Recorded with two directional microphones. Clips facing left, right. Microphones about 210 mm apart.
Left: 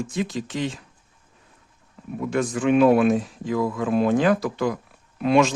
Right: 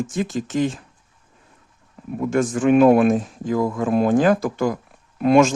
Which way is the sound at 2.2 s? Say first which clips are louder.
Right 4 dB; 45° right (ahead or behind).